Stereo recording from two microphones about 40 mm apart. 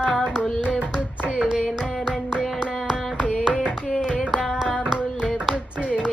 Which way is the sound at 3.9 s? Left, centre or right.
Centre.